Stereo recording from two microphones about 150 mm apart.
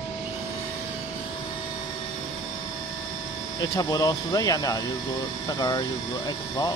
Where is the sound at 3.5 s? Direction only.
25° left (ahead or behind).